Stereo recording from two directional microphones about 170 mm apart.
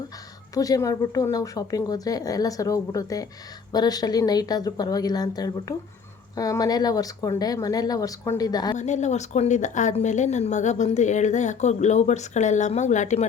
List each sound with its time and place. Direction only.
0.5 s speech: 20° left (ahead or behind)
8.8 s speech: 45° left (ahead or behind)